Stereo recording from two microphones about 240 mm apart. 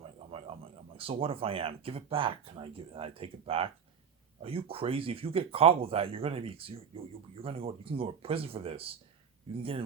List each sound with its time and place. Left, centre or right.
0.9 s speech: right